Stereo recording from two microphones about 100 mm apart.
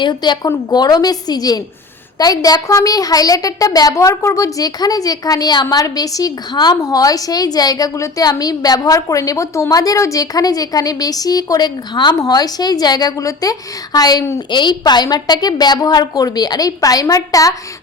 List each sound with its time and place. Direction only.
0.0 s a woman's voice: 45° left (ahead or behind)